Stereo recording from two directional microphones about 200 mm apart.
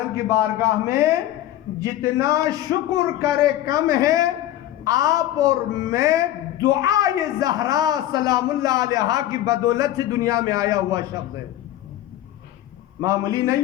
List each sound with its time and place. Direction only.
0.3 s a man's voice: 15° right (ahead or behind)
13.0 s a man's voice: 15° right (ahead or behind)